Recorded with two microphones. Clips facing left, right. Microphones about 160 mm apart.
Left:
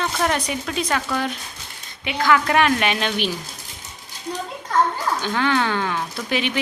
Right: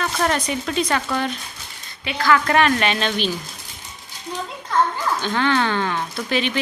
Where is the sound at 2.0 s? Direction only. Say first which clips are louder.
Even; 15° left (ahead or behind).